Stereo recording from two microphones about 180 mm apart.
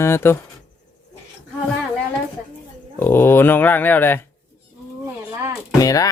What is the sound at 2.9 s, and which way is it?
Speech, 10° left (ahead or behind).